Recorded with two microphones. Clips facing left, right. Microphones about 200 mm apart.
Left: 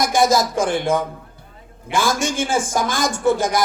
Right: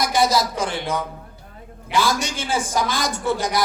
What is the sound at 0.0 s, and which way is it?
A man's voice, 50° left (ahead or behind).